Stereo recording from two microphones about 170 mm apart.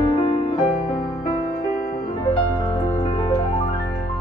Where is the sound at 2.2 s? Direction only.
30° left (ahead or behind).